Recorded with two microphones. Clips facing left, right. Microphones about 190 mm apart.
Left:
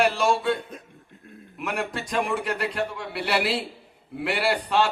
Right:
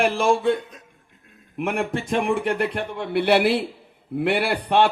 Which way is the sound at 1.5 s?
55° right (ahead or behind).